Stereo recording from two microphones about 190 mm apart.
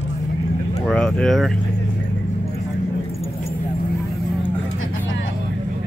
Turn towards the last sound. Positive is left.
turn(degrees=80)